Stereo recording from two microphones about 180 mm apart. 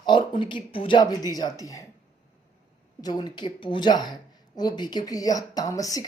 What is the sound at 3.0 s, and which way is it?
Speech, 25° left (ahead or behind).